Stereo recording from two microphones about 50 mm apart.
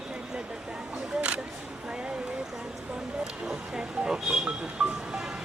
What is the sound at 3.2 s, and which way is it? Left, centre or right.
Speech, centre.